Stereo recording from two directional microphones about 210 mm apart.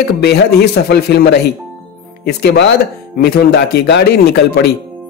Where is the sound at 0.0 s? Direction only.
50° left (ahead or behind).